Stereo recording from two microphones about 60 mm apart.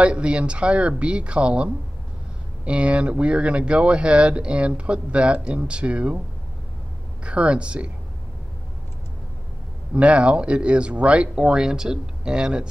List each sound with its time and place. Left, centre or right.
0.0 s speech: centre
7.2 s speech: centre
9.9 s speech: centre